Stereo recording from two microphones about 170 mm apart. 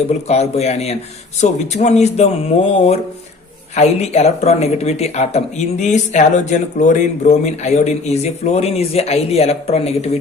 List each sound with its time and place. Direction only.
0.1 s speech: 40° left (ahead or behind)